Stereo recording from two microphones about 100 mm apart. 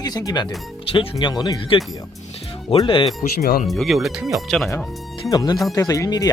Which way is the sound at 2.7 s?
90° left.